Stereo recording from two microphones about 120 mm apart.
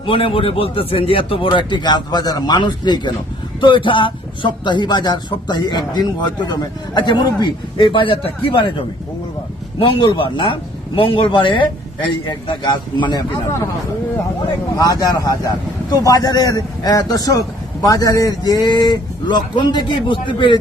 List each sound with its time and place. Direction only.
0.0 s speech: 50° left (ahead or behind)
14.8 s speech: 30° left (ahead or behind)